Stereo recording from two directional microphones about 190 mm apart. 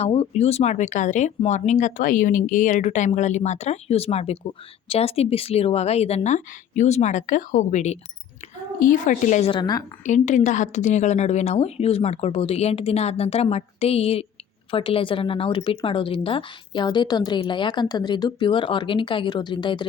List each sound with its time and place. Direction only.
0.0 s a woman's voice: 35° left (ahead or behind)
9.5 s speech: 25° left (ahead or behind)
10.0 s speech: 40° left (ahead or behind)